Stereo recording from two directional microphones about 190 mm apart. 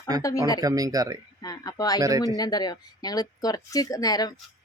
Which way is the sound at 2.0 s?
20° right (ahead or behind).